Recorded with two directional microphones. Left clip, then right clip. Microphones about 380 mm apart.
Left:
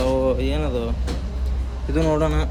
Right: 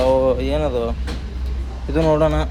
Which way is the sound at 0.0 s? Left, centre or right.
Centre.